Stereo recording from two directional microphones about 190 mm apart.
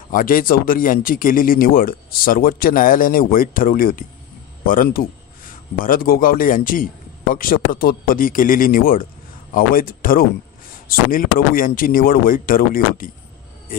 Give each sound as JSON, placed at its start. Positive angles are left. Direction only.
{"t": 0.1, "sound": "a man's voice", "side_deg": 45}